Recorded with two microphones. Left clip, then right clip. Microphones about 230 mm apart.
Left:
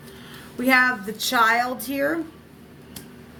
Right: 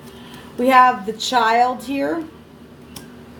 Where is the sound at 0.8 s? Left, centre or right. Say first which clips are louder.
Right 7 dB; left.